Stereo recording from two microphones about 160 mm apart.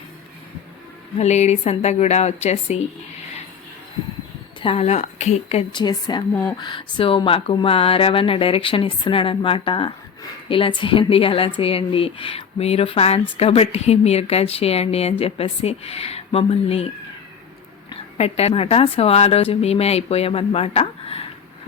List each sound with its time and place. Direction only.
1.2 s a woman's voice: 45° left (ahead or behind)
4.6 s a woman's voice: 40° left (ahead or behind)
5.7 s a woman's voice: 25° left (ahead or behind)
6.3 s speech: 10° left (ahead or behind)
6.6 s a woman's voice: 30° left (ahead or behind)
18.2 s a woman's voice: 40° left (ahead or behind)